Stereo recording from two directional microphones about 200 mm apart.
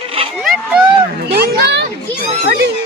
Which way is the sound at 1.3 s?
55° right (ahead or behind).